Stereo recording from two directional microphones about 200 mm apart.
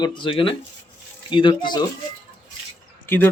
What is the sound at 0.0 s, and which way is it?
Speech, 25° left (ahead or behind).